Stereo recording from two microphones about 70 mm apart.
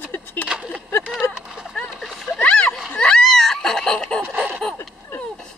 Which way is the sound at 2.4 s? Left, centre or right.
Centre.